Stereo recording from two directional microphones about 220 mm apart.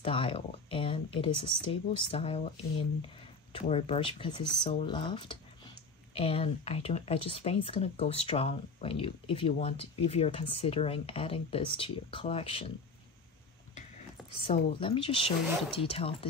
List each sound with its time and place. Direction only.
0.0 s speech: 25° left (ahead or behind)
3.5 s speech: 25° left (ahead or behind)
14.4 s speech: 25° left (ahead or behind)